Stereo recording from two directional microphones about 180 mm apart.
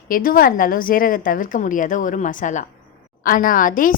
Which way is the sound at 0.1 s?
50° left (ahead or behind).